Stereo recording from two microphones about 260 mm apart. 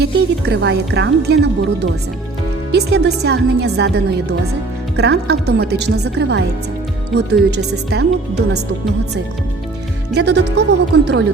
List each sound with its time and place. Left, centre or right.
0.0 s speech: right
2.7 s speech: right
10.2 s speech: right